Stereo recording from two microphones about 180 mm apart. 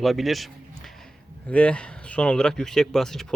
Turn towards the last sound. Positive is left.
turn(degrees=0)  # may be behind; listen again after turning